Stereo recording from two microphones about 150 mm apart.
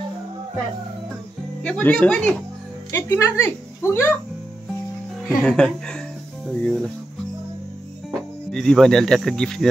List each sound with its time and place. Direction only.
1.6 s speech: 10° left (ahead or behind)
5.4 s speech: 5° left (ahead or behind)
8.5 s speech: 5° left (ahead or behind)